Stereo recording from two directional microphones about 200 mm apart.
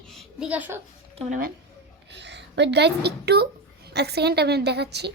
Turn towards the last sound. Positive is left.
turn(degrees=-55)  # may be behind; listen again after turning